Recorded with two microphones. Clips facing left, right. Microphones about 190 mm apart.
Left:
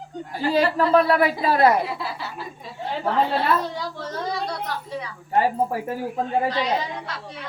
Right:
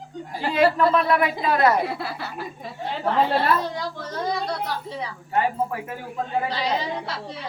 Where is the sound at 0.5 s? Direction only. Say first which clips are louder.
Left 1 dB; 35° left (ahead or behind).